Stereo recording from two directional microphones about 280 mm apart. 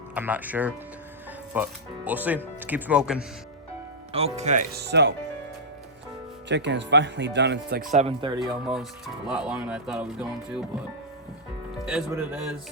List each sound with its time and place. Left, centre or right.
0.1 s speech: centre
4.1 s speech: right
6.5 s speech: right; by 8.4 s centre
8.6 s speech: centre
11.9 s speech: centre